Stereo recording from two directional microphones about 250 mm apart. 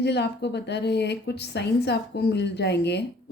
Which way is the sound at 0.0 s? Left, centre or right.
Left.